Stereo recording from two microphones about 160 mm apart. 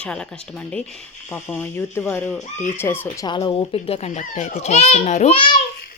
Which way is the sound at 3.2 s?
30° left (ahead or behind).